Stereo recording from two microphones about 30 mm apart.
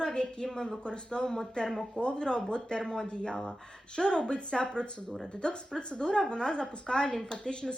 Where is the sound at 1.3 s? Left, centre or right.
Centre.